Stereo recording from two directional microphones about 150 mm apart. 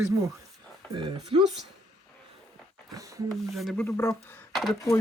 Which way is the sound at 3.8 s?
15° left (ahead or behind).